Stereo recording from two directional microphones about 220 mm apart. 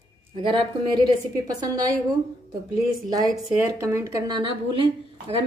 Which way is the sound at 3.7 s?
10° right (ahead or behind).